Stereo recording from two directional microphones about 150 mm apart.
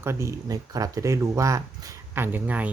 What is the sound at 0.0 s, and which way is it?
Speech, 20° right (ahead or behind).